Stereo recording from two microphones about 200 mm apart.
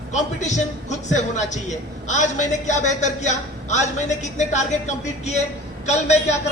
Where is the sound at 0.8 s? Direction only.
35° left (ahead or behind).